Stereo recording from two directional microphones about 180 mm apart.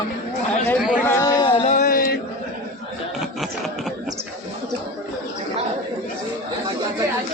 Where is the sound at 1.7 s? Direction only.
45° left (ahead or behind).